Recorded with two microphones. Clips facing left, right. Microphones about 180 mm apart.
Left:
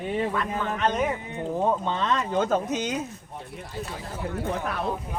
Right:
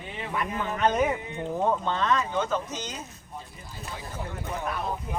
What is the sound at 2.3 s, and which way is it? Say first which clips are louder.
Speech: left 4 dB; 45° left (ahead or behind).